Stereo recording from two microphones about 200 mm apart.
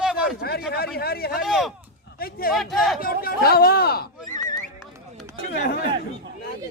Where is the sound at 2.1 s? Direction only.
50° left (ahead or behind).